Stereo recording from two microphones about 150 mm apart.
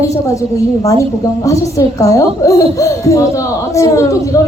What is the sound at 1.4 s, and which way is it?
A child's voice, 20° left (ahead or behind).